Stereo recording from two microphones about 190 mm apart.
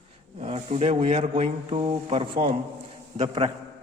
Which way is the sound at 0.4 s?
35° right (ahead or behind).